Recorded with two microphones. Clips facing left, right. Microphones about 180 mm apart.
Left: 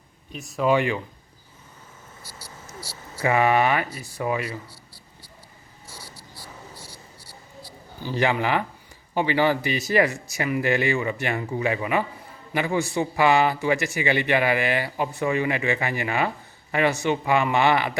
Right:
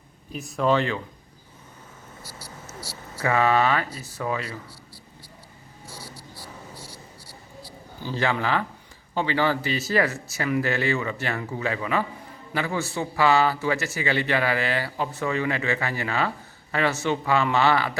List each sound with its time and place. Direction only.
0.3 s speech: centre (ahead or behind)
0.7 s a man's voice: 15° left (ahead or behind)
3.2 s a man's voice: 15° left (ahead or behind)
8.0 s a man's voice: 15° left (ahead or behind)